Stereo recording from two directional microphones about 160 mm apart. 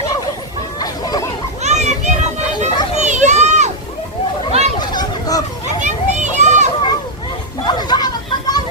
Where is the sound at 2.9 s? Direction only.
45° right (ahead or behind).